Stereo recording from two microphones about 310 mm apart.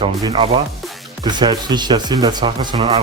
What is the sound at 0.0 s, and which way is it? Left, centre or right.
Speech, centre.